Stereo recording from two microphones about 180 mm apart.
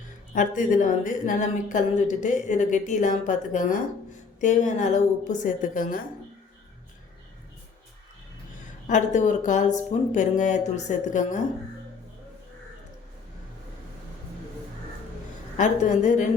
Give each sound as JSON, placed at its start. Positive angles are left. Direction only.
{"t": 0.3, "sound": "a woman's voice", "side_deg": 45}
{"t": 8.9, "sound": "a woman's voice", "side_deg": 45}
{"t": 15.5, "sound": "a woman's voice", "side_deg": 45}